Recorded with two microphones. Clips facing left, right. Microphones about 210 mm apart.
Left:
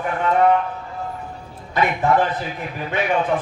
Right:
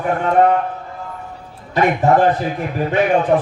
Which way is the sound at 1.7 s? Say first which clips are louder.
Right 4 dB; 45° right (ahead or behind).